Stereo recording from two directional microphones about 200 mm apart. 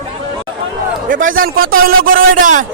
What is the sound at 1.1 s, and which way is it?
A man's voice, 45° right (ahead or behind).